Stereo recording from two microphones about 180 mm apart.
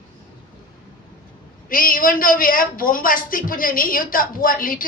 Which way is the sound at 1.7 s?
50° left (ahead or behind).